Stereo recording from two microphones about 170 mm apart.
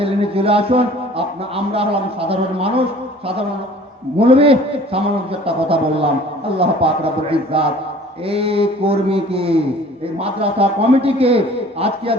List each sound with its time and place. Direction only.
0.0 s a man's voice: 35° right (ahead or behind)
4.2 s a man's voice: 35° right (ahead or behind)